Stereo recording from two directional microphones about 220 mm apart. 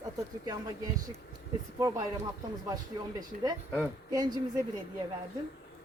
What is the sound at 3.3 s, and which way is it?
Speech, 40° right (ahead or behind).